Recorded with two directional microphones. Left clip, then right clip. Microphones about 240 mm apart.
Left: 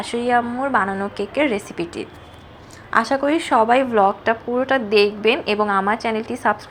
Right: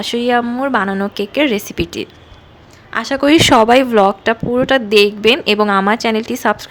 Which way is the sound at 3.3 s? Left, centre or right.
Right.